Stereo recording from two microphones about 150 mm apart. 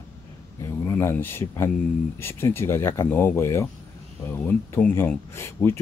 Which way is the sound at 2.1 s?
15° left (ahead or behind).